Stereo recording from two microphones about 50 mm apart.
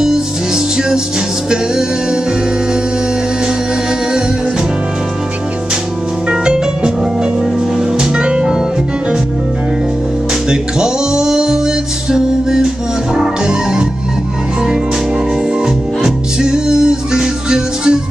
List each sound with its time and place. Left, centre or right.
6.4 s music: centre
8.0 s music: centre
10.5 s music: centre
16.0 s music: centre